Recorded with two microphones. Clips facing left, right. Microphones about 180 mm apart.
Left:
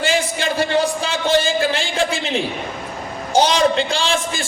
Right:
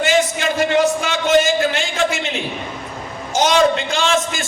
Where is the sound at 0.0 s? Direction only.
30° left (ahead or behind).